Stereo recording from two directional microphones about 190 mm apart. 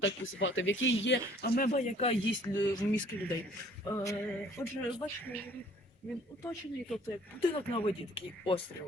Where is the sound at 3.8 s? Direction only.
15° left (ahead or behind).